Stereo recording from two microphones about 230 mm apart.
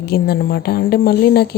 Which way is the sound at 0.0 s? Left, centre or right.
Left.